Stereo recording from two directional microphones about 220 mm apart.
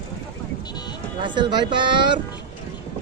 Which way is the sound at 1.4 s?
20° right (ahead or behind).